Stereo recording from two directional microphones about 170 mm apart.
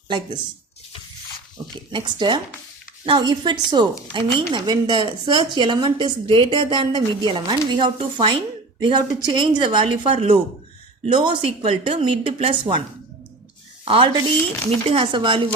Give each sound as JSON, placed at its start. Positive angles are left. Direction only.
{"t": 1.9, "sound": "a woman's voice", "side_deg": -25}
{"t": 13.8, "sound": "a woman's voice", "side_deg": -30}